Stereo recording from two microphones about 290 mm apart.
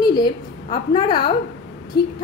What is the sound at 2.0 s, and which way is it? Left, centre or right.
Speech, left.